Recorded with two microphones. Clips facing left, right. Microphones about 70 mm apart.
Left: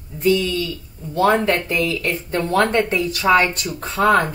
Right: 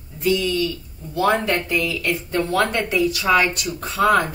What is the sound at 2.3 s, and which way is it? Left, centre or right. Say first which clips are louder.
A woman's voice: left 4 dB; left.